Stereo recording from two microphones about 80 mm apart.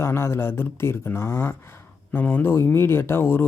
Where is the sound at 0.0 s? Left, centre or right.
Left.